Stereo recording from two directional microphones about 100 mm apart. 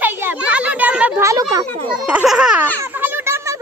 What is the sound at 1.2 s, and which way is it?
Speech, 35° right (ahead or behind).